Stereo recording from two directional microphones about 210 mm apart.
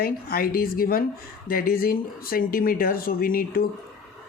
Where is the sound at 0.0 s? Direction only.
45° left (ahead or behind).